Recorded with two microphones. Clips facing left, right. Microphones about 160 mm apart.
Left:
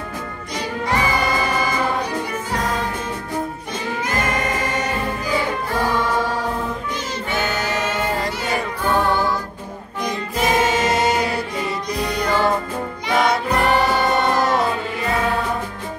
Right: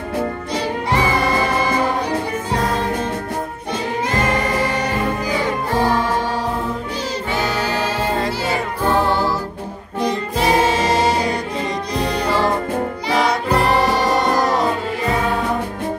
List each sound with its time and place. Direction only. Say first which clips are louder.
7.3 s music: right 1 dB; 35° right (ahead or behind)
14.1 s music: right 1 dB; 40° right (ahead or behind)